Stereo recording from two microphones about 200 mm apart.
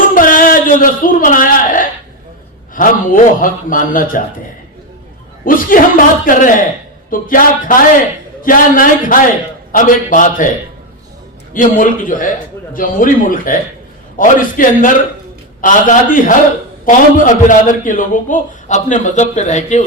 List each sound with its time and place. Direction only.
0.2 s a sound: 45° left (ahead or behind)
2.7 s a man's voice: 45° left (ahead or behind)
5.5 s a man's voice: 45° left (ahead or behind)
11.5 s a man's voice: 40° left (ahead or behind)